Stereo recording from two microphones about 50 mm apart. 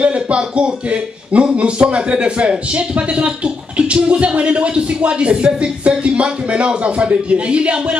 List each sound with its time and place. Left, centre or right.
0.0 s speech: right